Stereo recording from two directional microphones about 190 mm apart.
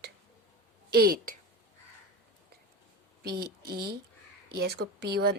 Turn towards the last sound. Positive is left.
turn(degrees=-55)  # may be behind; listen again after turning